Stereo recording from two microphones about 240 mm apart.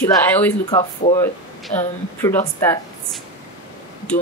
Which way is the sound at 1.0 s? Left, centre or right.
Left.